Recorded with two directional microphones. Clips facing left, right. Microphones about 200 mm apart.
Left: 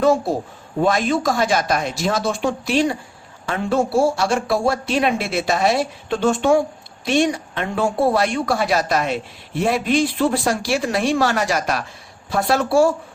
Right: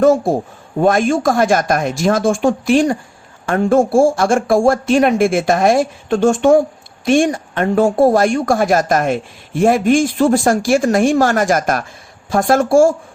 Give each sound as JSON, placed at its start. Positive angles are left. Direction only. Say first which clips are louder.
{"t": 0.8, "sound": "speech", "louder": "right 5 dB", "side_deg": -50}